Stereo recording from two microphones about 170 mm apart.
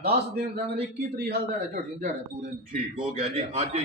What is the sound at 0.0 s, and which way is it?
A man's voice, 70° right (ahead or behind).